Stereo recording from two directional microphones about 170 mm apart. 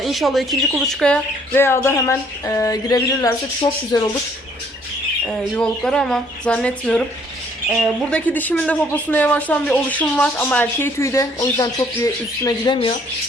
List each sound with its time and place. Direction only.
0.0 s speech: centre (ahead or behind); by 4.1 s 25° left (ahead or behind)
5.8 s speech: 5° left (ahead or behind)
8.1 s speech: 10° left (ahead or behind); by 12.9 s 25° left (ahead or behind)